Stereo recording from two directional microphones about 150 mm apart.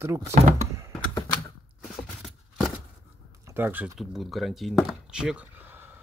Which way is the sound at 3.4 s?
15° right (ahead or behind).